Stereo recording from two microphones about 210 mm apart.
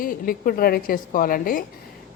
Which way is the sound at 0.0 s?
40° left (ahead or behind).